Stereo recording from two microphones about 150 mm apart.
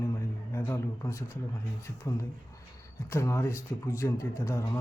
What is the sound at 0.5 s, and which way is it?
Speech, 20° left (ahead or behind).